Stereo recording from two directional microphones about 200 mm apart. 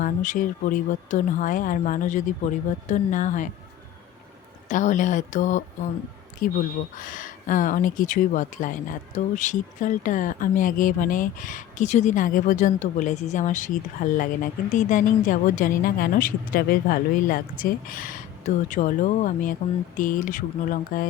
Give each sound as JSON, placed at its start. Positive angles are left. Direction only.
{"t": 0.0, "sound": "speech", "side_deg": 40}
{"t": 4.7, "sound": "speech", "side_deg": 40}